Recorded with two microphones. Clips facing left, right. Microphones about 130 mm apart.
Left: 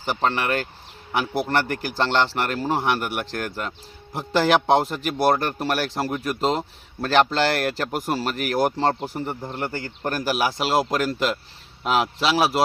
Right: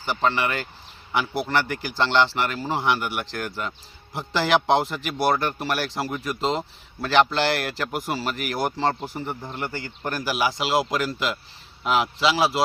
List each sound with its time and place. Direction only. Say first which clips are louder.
0.0 s speech: even; 45° left (ahead or behind)